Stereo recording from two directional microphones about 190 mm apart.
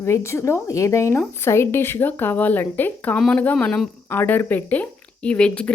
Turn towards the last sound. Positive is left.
turn(degrees=5)  # may be behind; listen again after turning